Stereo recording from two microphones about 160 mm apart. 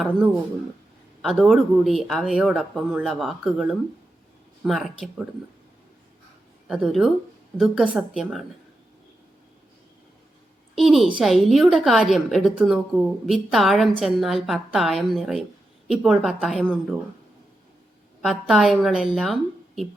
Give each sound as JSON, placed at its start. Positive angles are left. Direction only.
{"t": 1.2, "sound": "speech", "side_deg": 0}
{"t": 6.7, "sound": "speech", "side_deg": -5}
{"t": 10.8, "sound": "speech", "side_deg": 0}
{"t": 18.2, "sound": "speech", "side_deg": 0}